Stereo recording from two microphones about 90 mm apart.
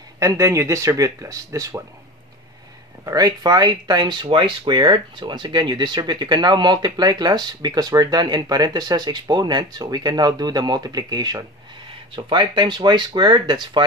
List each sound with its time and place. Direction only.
0.2 s speech: 35° right (ahead or behind)
3.1 s speech: 45° right (ahead or behind)
12.3 s speech: 60° right (ahead or behind)